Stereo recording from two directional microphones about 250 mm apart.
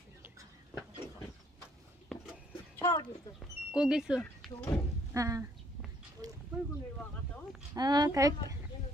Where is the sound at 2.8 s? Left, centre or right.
Centre.